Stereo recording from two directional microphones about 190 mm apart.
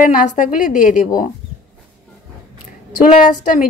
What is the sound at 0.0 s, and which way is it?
Speech, 45° left (ahead or behind).